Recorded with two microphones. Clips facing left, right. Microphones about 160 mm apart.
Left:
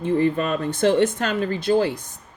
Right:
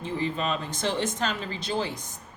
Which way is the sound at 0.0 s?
55° left (ahead or behind).